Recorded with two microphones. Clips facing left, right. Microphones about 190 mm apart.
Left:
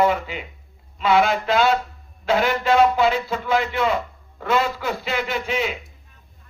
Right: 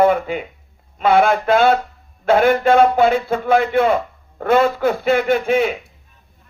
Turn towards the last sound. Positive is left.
turn(degrees=-55)  # may be behind; listen again after turning